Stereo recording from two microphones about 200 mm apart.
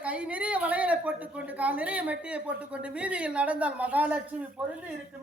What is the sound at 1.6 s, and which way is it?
Speech, 5° right (ahead or behind).